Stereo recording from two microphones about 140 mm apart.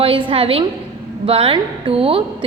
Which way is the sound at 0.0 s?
40° right (ahead or behind).